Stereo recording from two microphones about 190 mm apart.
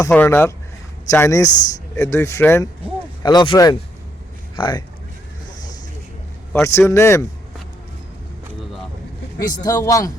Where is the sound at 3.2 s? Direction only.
25° left (ahead or behind).